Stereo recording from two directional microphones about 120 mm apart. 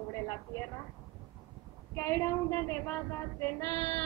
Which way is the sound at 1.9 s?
25° left (ahead or behind).